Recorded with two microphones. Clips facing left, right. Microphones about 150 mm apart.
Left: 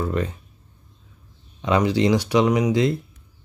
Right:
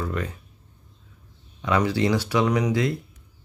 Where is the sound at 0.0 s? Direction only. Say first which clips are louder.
Left 5 dB; 25° left (ahead or behind).